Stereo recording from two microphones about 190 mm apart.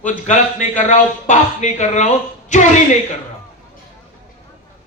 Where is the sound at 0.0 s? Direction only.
40° left (ahead or behind).